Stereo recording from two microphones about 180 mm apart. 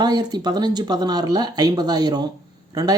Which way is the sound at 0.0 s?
25° right (ahead or behind).